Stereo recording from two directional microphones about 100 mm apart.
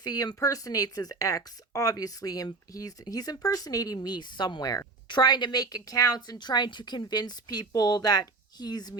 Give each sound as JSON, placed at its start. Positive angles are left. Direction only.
{"t": 0.0, "sound": "a woman's voice", "side_deg": 40}